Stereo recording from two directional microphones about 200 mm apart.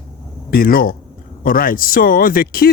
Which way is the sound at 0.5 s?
50° left (ahead or behind).